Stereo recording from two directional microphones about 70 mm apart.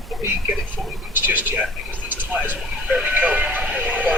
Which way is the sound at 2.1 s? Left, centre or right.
Right.